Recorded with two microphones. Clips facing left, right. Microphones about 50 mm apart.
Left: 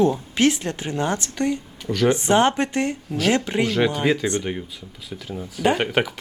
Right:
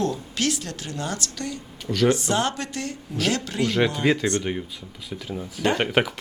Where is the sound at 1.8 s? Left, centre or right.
Centre.